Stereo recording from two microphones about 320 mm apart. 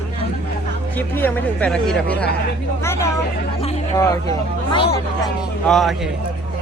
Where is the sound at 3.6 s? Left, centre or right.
Centre.